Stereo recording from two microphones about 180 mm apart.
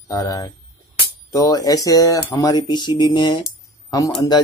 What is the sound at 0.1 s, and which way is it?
Speech, 20° left (ahead or behind).